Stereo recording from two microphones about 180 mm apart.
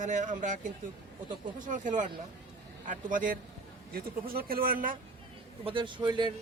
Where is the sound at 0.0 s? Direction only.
45° right (ahead or behind).